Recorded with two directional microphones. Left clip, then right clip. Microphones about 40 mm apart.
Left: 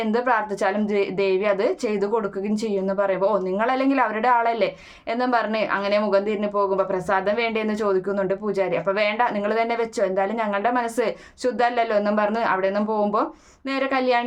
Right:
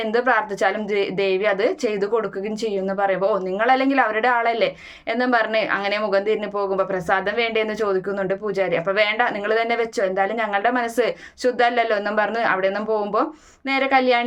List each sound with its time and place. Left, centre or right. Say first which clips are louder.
0.1 s a woman's voice: right 3 dB; left